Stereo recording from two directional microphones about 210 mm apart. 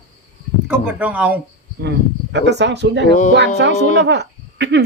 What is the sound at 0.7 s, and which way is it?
Speech, 5° right (ahead or behind).